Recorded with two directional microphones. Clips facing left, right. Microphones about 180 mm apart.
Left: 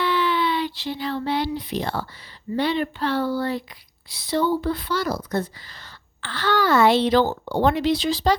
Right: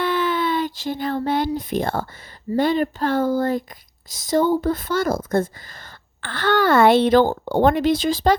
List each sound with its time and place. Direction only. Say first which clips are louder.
0.0 s speech: right 1 dB; 45° right (ahead or behind)